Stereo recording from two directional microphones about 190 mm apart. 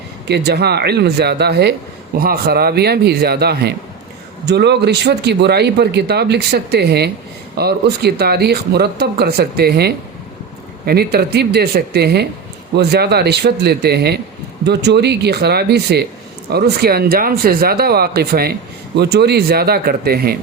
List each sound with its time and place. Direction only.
0.3 s speech: 60° right (ahead or behind)